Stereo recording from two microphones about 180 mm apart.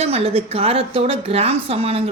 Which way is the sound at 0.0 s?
35° right (ahead or behind).